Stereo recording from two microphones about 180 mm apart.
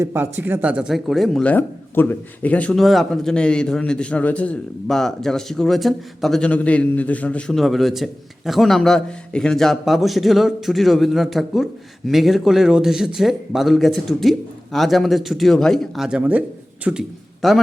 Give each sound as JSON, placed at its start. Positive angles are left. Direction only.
{"t": 0.0, "sound": "speech", "side_deg": -10}